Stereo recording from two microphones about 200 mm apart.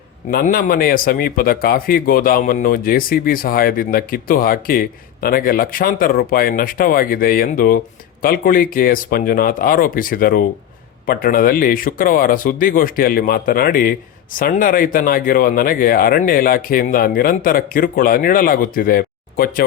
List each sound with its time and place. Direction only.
0.3 s speech: 45° left (ahead or behind)